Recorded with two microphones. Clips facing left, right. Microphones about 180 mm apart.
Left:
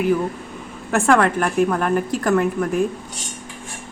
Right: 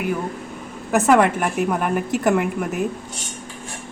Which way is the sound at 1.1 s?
10° right (ahead or behind).